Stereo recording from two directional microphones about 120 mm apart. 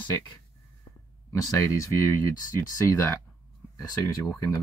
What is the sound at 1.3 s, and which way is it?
Speech, 25° left (ahead or behind).